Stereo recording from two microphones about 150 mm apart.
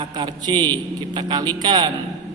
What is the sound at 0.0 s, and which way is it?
A man's voice, 30° right (ahead or behind).